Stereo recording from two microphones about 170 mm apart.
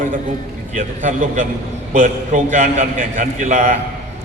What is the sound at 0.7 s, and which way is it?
A man's voice, 45° right (ahead or behind).